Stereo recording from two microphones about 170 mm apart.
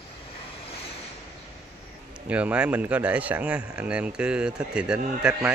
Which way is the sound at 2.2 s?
10° right (ahead or behind).